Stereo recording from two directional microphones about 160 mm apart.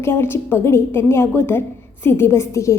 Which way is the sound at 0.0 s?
15° left (ahead or behind).